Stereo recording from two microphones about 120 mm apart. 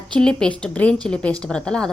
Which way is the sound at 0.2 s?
5° left (ahead or behind).